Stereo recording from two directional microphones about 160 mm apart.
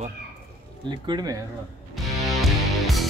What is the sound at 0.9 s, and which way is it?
Speech, 30° right (ahead or behind).